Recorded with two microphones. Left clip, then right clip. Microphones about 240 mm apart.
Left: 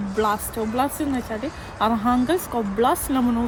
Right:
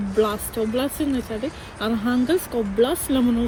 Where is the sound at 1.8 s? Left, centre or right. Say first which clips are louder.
Left 3 dB; left.